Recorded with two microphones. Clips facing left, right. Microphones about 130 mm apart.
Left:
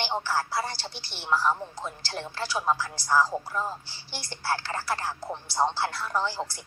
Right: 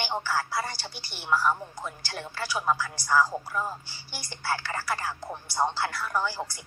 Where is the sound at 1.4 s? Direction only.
30° left (ahead or behind).